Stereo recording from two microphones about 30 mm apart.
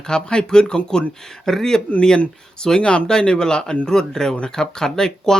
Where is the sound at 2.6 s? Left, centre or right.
Left.